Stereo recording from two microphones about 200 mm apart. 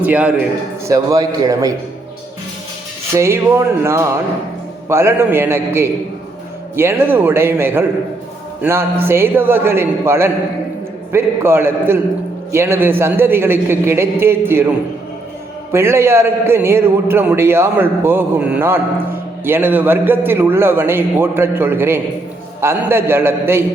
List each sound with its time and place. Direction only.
0.0 s a man's voice: 5° right (ahead or behind)
3.2 s a man's voice: 15° right (ahead or behind)
15.7 s a man's voice: 10° right (ahead or behind)